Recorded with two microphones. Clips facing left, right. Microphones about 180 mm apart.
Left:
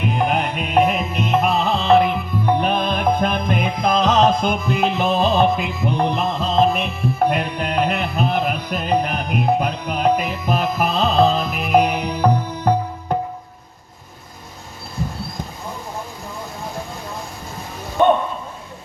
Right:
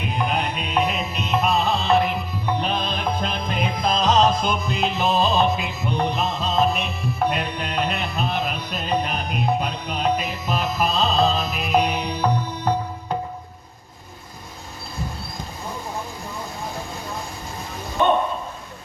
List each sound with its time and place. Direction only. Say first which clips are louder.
0.0 s music: left 4 dB; 50° left (ahead or behind)